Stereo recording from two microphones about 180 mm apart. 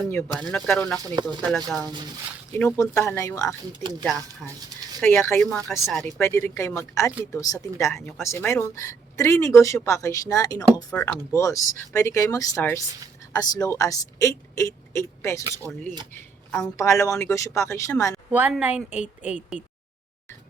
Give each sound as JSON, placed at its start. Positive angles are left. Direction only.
{"t": 0.0, "sound": "speech", "side_deg": 10}
{"t": 0.9, "sound": "speech", "side_deg": -20}
{"t": 2.6, "sound": "speech", "side_deg": 15}
{"t": 4.0, "sound": "speech", "side_deg": 0}
{"t": 4.9, "sound": "speech", "side_deg": 10}
{"t": 6.1, "sound": "speech", "side_deg": 15}
{"t": 7.9, "sound": "speech", "side_deg": 0}
{"t": 8.2, "sound": "speech", "side_deg": 15}
{"t": 16.6, "sound": "speech", "side_deg": 15}
{"t": 18.3, "sound": "a woman's voice", "side_deg": -10}